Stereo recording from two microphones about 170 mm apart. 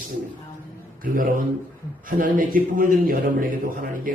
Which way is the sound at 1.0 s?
55° right (ahead or behind).